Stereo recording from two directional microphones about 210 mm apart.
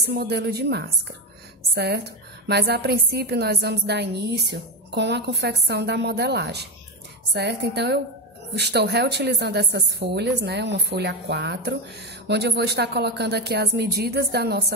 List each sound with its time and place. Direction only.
0.0 s a woman's voice: 50° right (ahead or behind)